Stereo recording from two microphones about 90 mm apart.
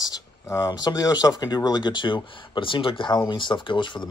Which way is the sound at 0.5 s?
35° left (ahead or behind).